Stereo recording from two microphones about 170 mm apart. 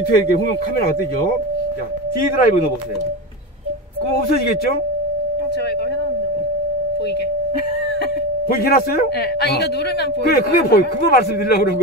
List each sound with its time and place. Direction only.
0.1 s a man's voice: 65° left (ahead or behind)
2.3 s speech: 55° left (ahead or behind)
4.1 s a man's voice: 65° left (ahead or behind)
8.5 s a man's voice: 60° left (ahead or behind)